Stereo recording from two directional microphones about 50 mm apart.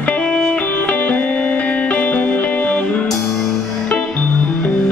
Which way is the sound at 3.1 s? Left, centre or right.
Centre.